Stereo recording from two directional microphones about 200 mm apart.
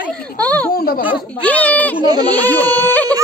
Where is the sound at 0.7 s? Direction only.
50° left (ahead or behind).